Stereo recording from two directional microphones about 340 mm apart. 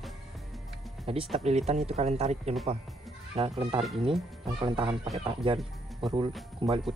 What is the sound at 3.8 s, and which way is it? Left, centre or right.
Speech, centre.